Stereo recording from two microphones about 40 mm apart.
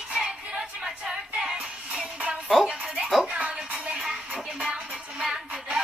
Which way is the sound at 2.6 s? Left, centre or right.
Right.